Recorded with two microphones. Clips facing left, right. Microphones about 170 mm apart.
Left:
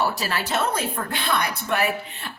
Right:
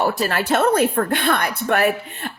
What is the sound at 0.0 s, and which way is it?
A woman's voice, 55° right (ahead or behind).